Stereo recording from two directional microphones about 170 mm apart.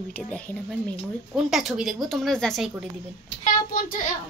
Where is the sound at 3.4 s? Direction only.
55° left (ahead or behind).